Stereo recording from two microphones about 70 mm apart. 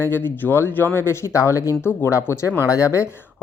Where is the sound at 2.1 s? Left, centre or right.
Left.